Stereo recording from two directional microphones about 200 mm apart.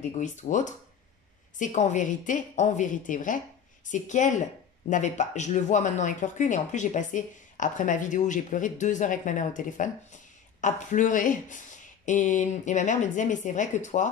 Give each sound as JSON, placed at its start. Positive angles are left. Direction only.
{"t": 0.2, "sound": "speech", "side_deg": 40}